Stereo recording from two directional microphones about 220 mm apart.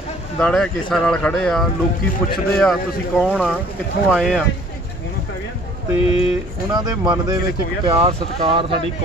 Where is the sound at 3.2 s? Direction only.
Centre (ahead or behind).